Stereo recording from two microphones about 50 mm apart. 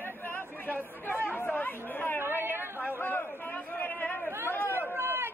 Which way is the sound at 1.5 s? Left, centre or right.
Left.